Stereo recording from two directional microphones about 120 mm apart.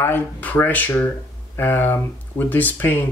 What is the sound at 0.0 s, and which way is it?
Speech, 15° left (ahead or behind).